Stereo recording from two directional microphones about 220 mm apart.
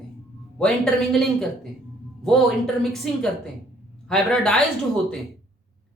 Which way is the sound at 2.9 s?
Centre (ahead or behind).